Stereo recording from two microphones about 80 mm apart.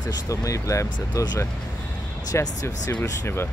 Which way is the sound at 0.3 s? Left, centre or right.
Left.